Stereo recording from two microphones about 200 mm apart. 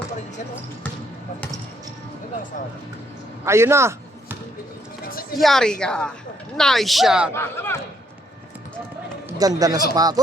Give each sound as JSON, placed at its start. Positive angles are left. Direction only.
{"t": 3.4, "sound": "basketball bounce", "side_deg": -15}
{"t": 5.4, "sound": "a woman's voice", "side_deg": 0}
{"t": 7.3, "sound": "speech", "side_deg": 10}
{"t": 9.6, "sound": "speech", "side_deg": -20}